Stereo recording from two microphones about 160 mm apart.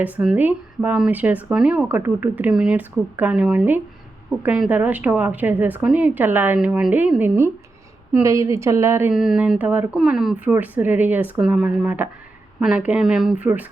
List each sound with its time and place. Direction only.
0.0 s speech: 5° right (ahead or behind)
9.1 s speech: 5° right (ahead or behind)